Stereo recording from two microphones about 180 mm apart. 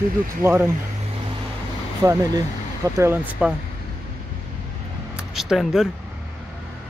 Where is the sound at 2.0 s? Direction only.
15° right (ahead or behind).